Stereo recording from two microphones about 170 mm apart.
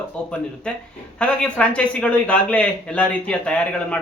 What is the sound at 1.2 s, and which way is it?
Speech, 5° left (ahead or behind).